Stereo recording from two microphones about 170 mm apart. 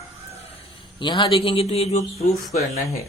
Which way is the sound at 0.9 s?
30° left (ahead or behind).